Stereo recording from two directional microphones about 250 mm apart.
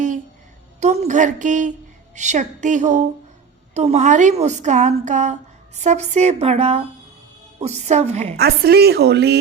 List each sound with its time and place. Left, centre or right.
0.8 s a woman's voice: right
8.4 s a woman's voice: right